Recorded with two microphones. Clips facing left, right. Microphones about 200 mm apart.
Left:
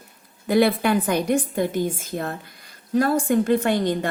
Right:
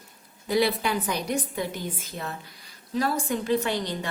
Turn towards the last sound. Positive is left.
turn(degrees=50)  # may be behind; listen again after turning